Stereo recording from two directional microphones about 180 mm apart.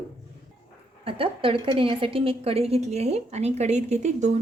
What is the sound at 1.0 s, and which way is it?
A woman's voice, 30° right (ahead or behind).